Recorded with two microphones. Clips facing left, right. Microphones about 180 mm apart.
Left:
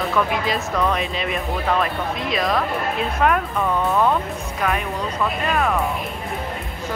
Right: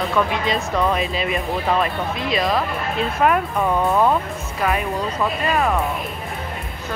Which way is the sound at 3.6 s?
15° right (ahead or behind).